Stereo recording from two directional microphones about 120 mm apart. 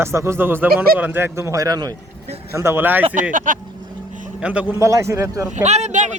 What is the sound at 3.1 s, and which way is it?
Speech, 90° right.